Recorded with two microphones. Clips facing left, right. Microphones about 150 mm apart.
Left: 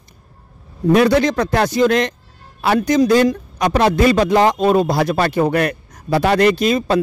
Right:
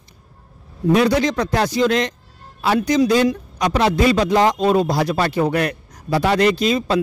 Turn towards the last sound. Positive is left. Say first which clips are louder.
# left 2 dB
turn(degrees=50)  # may be behind; listen again after turning